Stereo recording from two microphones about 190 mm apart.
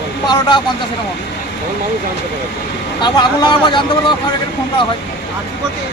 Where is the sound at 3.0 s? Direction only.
25° left (ahead or behind).